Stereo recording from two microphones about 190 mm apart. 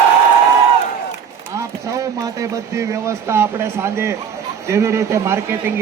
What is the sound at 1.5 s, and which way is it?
A man's voice, 15° right (ahead or behind).